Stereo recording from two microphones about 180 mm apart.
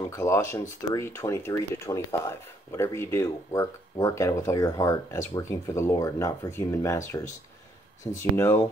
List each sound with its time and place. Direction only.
0.1 s speech: 15° left (ahead or behind)
8.2 s speech: 15° left (ahead or behind)